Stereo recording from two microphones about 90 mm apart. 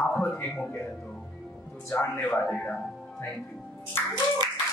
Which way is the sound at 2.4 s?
10° left (ahead or behind).